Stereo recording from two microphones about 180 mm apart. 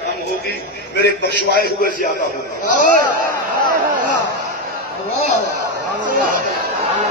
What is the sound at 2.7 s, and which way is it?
Speech, 45° left (ahead or behind).